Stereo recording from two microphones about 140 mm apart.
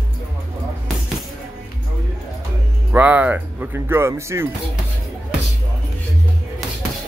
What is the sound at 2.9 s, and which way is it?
Speech, 10° right (ahead or behind).